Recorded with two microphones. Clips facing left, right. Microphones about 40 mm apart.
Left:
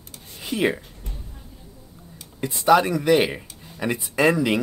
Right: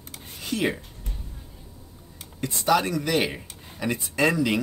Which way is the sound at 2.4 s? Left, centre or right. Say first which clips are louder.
Left 5 dB; centre.